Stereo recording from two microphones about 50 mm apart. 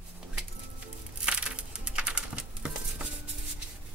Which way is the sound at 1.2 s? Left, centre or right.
Centre.